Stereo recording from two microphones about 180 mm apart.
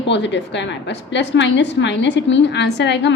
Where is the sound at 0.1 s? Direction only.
80° left.